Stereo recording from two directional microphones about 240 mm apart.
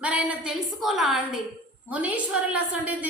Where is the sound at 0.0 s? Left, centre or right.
Centre.